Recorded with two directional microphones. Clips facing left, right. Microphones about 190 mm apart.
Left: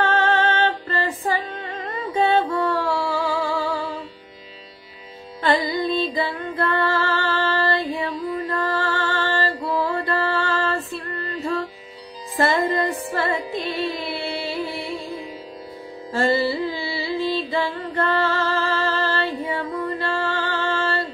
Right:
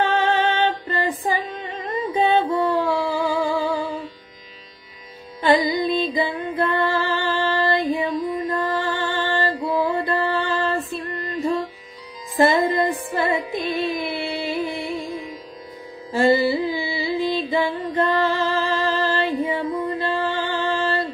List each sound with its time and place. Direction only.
0.0 s music: 15° right (ahead or behind)
5.4 s music: 15° right (ahead or behind)
12.4 s music: 15° right (ahead or behind)
16.1 s music: 15° right (ahead or behind)